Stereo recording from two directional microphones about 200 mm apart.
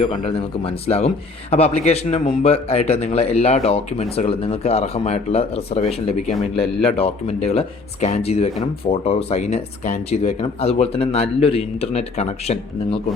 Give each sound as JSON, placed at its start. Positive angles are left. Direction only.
{"t": 0.0, "sound": "speech", "side_deg": 25}